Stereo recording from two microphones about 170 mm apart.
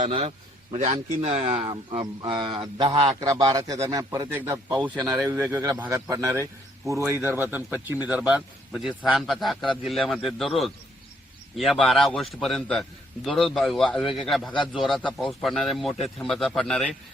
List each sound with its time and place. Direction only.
0.0 s a man's voice: 35° right (ahead or behind); by 16.9 s 5° left (ahead or behind)